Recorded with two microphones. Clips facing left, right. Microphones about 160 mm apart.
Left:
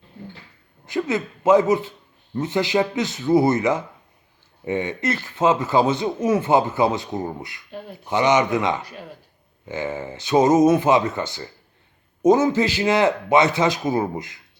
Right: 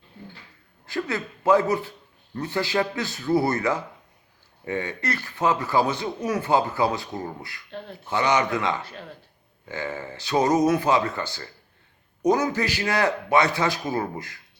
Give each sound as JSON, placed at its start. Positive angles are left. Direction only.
{"t": 0.9, "sound": "a man's voice", "side_deg": 20}
{"t": 7.7, "sound": "a man's voice", "side_deg": 10}